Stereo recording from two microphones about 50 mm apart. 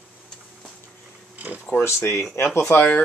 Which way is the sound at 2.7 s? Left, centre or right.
Left.